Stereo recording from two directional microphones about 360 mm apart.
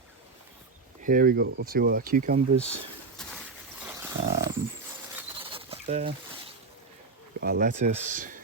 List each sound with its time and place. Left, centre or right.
1.0 s speech: right
3.2 s a sound: centre
3.8 s wild animals: centre
5.4 s bird: centre
7.3 s speech: right